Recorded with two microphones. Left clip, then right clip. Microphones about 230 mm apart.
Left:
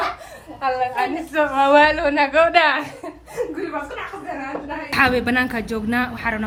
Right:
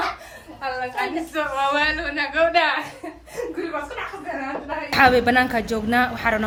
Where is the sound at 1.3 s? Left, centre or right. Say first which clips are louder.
Left 8 dB; left.